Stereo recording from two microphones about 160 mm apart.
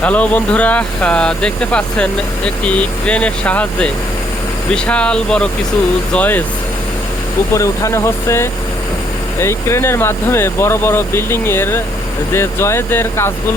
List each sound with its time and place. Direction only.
0.0 s speech: 10° left (ahead or behind)
7.5 s speech: 20° left (ahead or behind)